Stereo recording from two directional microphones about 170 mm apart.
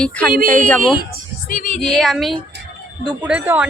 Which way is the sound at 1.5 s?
50° left (ahead or behind).